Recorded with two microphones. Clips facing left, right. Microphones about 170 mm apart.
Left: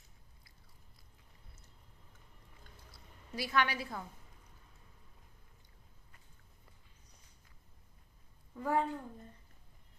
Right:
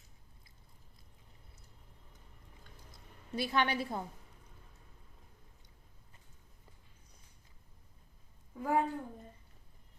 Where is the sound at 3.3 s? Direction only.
25° right (ahead or behind).